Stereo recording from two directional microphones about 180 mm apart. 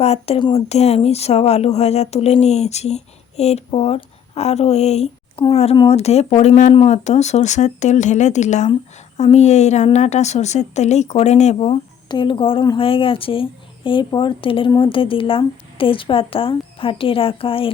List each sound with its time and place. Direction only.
0.0 s a woman's voice: 35° left (ahead or behind)